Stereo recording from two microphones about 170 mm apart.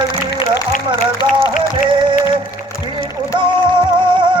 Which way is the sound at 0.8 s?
30° right (ahead or behind).